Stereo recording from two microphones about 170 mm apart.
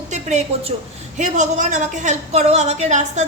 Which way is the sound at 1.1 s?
45° right (ahead or behind).